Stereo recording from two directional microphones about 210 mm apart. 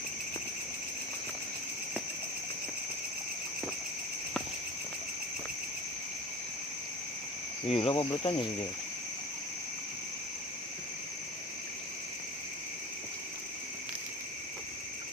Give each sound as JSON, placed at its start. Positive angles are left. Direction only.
{"t": 7.7, "sound": "speech", "side_deg": 25}